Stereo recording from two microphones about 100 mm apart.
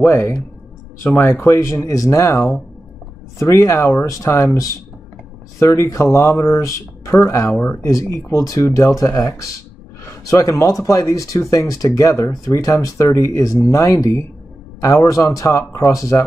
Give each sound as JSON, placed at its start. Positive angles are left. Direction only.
{"t": 0.0, "sound": "speech", "side_deg": 25}